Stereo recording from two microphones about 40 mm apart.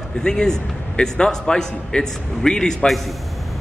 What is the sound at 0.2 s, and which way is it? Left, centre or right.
A man's voice, centre.